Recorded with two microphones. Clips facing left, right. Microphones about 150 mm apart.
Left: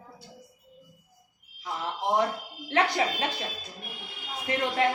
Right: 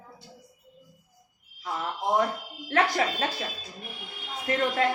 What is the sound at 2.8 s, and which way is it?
Speech, 20° left (ahead or behind).